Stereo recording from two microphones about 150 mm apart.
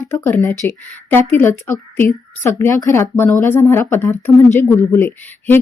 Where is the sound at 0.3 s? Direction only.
15° left (ahead or behind).